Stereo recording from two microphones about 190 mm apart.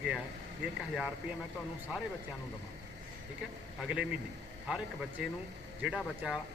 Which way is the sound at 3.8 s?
5° right (ahead or behind).